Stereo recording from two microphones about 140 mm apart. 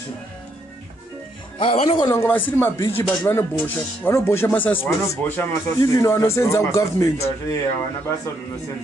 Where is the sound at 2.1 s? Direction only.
15° left (ahead or behind).